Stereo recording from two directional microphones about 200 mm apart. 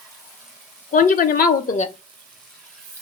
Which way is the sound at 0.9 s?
45° left (ahead or behind).